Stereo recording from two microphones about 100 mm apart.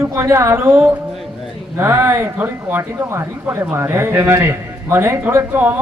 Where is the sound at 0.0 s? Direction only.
30° right (ahead or behind).